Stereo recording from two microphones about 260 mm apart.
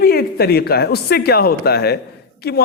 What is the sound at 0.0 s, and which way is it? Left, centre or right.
A man's voice, left.